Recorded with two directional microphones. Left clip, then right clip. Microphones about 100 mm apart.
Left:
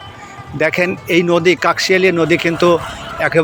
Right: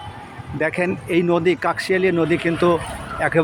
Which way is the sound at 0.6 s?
15° left (ahead or behind).